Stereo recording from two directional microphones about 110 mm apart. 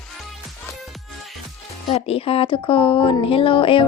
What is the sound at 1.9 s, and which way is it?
A woman's voice, 65° left (ahead or behind).